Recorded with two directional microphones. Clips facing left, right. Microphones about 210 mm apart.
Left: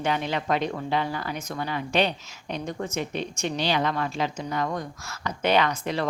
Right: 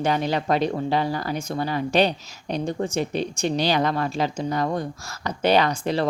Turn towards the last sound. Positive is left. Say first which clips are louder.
# right 3 dB
turn(degrees=-30)  # may be behind; listen again after turning